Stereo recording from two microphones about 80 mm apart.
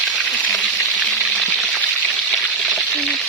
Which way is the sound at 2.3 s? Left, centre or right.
Centre.